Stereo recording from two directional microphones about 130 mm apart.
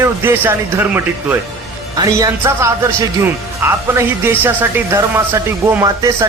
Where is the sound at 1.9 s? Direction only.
30° right (ahead or behind).